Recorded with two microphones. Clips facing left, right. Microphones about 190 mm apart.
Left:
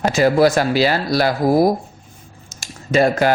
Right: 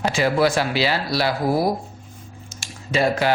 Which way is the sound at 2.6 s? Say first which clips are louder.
Left 5 dB; 45° left (ahead or behind).